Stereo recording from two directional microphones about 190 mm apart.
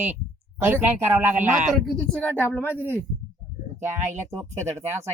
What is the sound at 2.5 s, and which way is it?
Speech, 10° left (ahead or behind).